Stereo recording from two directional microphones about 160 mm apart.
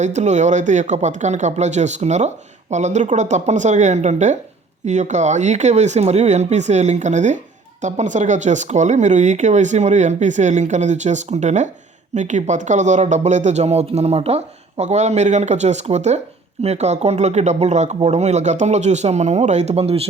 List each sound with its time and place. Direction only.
0.0 s speech: 45° right (ahead or behind)